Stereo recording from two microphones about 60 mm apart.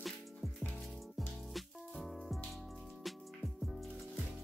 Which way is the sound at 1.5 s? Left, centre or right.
Centre.